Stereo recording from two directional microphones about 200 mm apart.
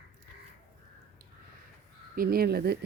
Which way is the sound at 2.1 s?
50° right (ahead or behind).